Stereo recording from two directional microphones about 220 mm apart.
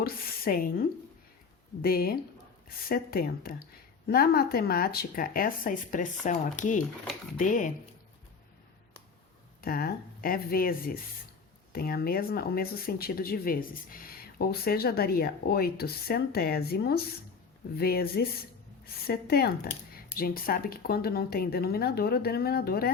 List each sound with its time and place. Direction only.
0.0 s a woman's voice: 40° left (ahead or behind)
9.6 s speech: 45° left (ahead or behind)